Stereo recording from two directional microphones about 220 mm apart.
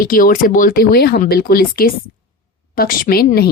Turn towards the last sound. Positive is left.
turn(degrees=45)  # may be behind; listen again after turning